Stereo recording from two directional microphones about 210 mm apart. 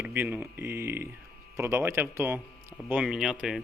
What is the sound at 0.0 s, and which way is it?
Speech, 10° right (ahead or behind).